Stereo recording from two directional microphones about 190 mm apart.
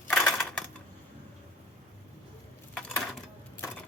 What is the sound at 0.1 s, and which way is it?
Typewriter, 5° left (ahead or behind).